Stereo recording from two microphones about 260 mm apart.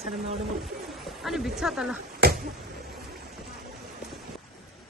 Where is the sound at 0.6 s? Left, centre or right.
Centre.